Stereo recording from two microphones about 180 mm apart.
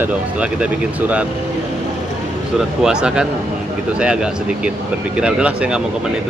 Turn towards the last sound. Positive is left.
turn(degrees=-5)  # may be behind; listen again after turning